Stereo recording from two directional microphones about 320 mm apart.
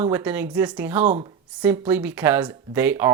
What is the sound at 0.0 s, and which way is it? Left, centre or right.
Speech, centre.